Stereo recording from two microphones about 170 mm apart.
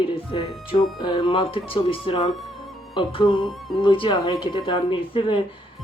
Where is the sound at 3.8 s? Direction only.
25° left (ahead or behind).